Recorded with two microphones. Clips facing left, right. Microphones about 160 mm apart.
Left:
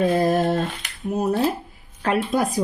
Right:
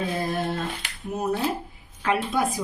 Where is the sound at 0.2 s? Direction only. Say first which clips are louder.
Left 8 dB; 40° left (ahead or behind).